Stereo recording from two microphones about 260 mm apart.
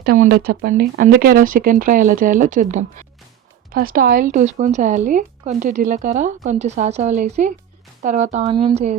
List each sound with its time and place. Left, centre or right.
0.0 s speech: right